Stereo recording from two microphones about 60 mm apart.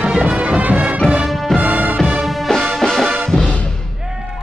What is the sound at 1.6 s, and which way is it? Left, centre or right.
Music, right.